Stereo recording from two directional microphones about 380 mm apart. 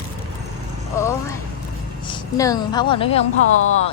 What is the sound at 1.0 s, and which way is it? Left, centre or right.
Clip-clop, centre.